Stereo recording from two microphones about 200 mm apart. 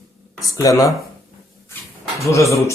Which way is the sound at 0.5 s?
15° left (ahead or behind).